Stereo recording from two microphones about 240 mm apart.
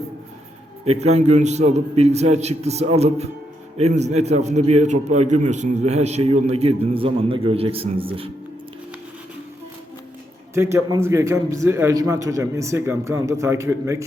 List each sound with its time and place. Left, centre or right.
0.9 s a man's voice: right
10.5 s a man's voice: centre